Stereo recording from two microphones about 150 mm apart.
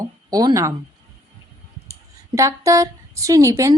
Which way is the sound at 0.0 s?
25° right (ahead or behind).